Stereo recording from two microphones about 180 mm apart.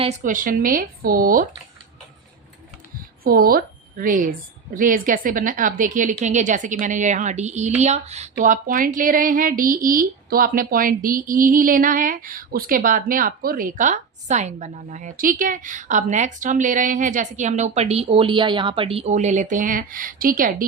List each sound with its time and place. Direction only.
0.0 s speech: 40° right (ahead or behind)
3.2 s speech: 55° right (ahead or behind)